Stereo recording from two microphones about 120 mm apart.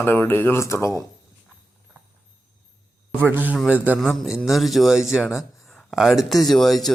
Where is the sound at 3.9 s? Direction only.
5° right (ahead or behind).